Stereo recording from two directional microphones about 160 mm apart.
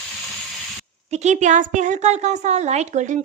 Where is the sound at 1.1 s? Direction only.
50° right (ahead or behind).